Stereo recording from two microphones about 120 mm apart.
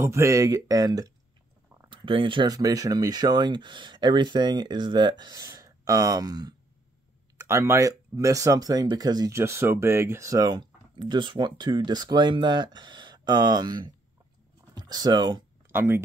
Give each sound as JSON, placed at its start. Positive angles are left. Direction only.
{"t": 0.0, "sound": "speech", "side_deg": -25}
{"t": 1.9, "sound": "speech", "side_deg": -45}
{"t": 2.5, "sound": "speech", "side_deg": -30}
{"t": 7.3, "sound": "speech", "side_deg": -20}
{"t": 9.3, "sound": "speech", "side_deg": -20}
{"t": 15.7, "sound": "speech", "side_deg": -20}